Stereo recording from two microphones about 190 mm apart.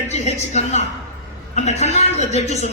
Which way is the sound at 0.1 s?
35° left (ahead or behind).